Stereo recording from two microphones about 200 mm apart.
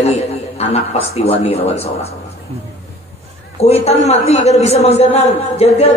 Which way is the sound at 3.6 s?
30° left (ahead or behind).